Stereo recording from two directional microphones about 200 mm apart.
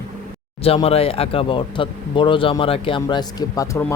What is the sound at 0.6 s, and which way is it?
Speech, 30° left (ahead or behind).